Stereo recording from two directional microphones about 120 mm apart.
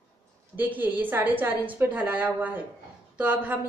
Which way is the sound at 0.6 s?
15° right (ahead or behind).